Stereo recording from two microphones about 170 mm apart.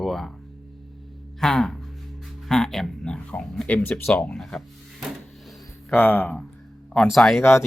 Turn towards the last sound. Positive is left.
turn(degrees=0)  # may be behind; listen again after turning